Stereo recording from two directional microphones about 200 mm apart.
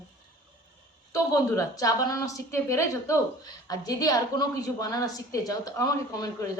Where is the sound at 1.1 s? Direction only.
15° left (ahead or behind).